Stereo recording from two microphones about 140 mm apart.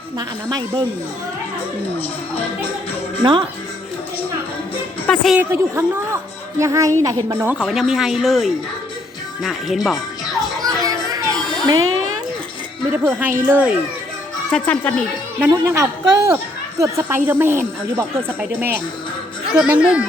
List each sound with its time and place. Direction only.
0.2 s a man's voice: 30° right (ahead or behind)
5.0 s speech: centre (ahead or behind)
5.4 s a man's voice: 20° right (ahead or behind)
7.7 s speech: 5° right (ahead or behind)
10.6 s children playing: 25° right (ahead or behind)
12.9 s speech: 10° right (ahead or behind)
14.5 s speech: 10° left (ahead or behind)
15.4 s a man's voice: 15° right (ahead or behind)